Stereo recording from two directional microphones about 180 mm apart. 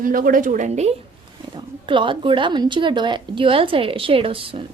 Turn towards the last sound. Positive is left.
turn(degrees=-30)  # may be behind; listen again after turning